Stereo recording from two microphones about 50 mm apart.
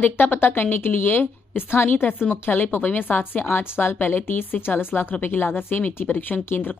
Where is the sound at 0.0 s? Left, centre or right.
Left.